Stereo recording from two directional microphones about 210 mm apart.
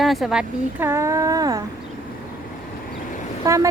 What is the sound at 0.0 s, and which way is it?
Speech, centre (ahead or behind).